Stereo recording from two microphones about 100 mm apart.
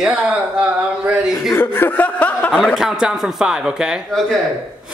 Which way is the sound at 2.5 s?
Centre (ahead or behind).